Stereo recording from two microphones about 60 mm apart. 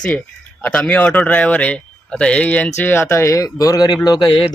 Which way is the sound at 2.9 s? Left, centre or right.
Left.